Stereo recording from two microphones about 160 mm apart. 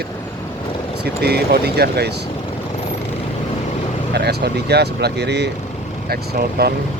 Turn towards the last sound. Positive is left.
turn(degrees=-80)